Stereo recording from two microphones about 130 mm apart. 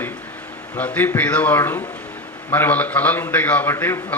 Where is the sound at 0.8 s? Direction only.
10° left (ahead or behind).